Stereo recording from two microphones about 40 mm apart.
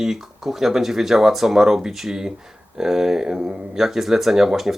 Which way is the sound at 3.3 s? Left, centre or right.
Right.